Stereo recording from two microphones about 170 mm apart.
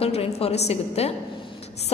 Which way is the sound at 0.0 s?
35° left (ahead or behind).